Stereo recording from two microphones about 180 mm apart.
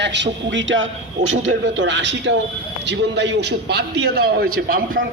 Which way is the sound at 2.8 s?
75° right (ahead or behind).